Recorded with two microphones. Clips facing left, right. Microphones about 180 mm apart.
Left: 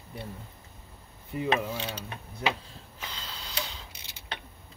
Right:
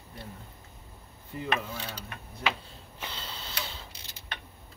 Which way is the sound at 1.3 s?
20° left (ahead or behind).